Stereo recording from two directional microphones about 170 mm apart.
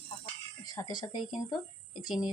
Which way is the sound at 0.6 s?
20° left (ahead or behind).